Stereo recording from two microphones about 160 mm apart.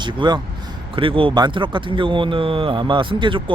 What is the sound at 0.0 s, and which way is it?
A man's voice, 30° right (ahead or behind).